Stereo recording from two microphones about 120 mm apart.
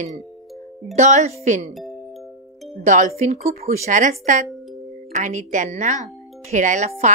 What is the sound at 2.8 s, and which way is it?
Speech, 80° right.